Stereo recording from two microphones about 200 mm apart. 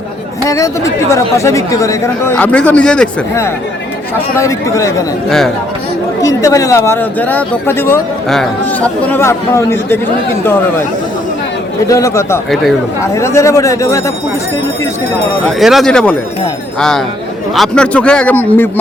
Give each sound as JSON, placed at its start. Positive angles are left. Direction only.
{"t": 0.4, "sound": "speech", "side_deg": 15}
{"t": 4.4, "sound": "speech", "side_deg": 15}
{"t": 6.2, "sound": "speech", "side_deg": 15}
{"t": 11.9, "sound": "speech", "side_deg": 15}
{"t": 15.4, "sound": "a man's voice", "side_deg": 0}
{"t": 17.5, "sound": "a man's voice", "side_deg": 0}